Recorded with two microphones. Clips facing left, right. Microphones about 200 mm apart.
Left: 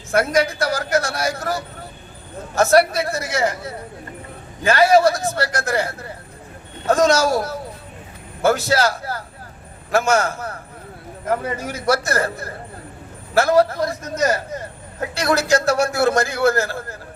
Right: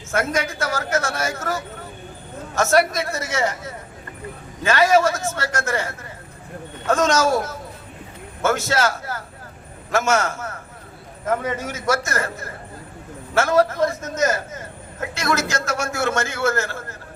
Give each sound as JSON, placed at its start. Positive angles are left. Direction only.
{"t": 0.2, "sound": "a man's voice", "side_deg": 35}